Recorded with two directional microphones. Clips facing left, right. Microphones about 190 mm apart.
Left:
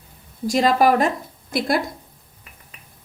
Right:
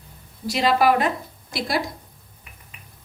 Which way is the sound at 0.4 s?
45° left (ahead or behind).